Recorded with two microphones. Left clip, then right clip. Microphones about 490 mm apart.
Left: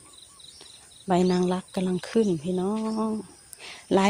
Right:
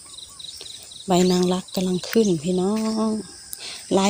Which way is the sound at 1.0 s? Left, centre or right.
Left.